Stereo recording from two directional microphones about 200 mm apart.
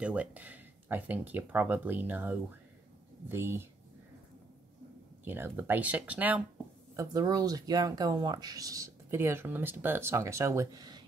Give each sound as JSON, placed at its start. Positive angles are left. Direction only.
{"t": 0.0, "sound": "speech", "side_deg": -5}
{"t": 5.2, "sound": "speech", "side_deg": -10}
{"t": 7.0, "sound": "speech", "side_deg": -20}